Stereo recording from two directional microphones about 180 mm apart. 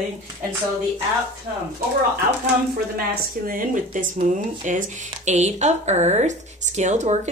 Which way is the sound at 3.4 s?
50° right (ahead or behind).